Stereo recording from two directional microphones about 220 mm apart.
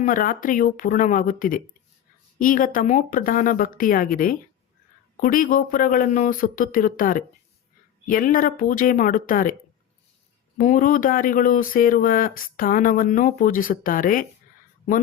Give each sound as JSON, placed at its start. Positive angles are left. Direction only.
{"t": 0.0, "sound": "speech", "side_deg": 40}
{"t": 10.6, "sound": "speech", "side_deg": 35}